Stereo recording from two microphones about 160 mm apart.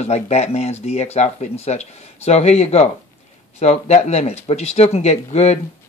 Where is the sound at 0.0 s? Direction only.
45° left (ahead or behind).